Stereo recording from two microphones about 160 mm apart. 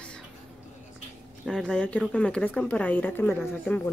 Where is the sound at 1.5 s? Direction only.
5° left (ahead or behind).